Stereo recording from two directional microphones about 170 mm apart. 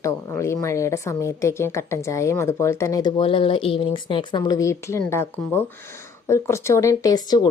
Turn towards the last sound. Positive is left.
turn(degrees=25)  # may be behind; listen again after turning